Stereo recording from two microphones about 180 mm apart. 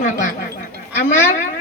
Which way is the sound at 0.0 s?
50° left (ahead or behind).